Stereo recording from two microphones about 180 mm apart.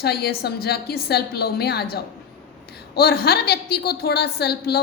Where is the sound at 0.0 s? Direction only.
60° left (ahead or behind).